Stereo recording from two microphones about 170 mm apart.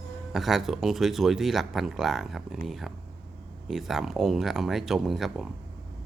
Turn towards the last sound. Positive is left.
turn(degrees=0)  # may be behind; listen again after turning